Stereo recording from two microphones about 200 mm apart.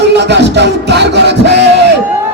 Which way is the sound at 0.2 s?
60° right (ahead or behind).